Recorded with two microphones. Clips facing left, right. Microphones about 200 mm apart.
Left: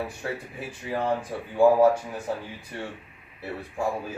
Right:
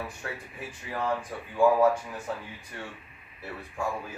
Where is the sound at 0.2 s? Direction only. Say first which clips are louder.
Left 5 dB; 30° left (ahead or behind).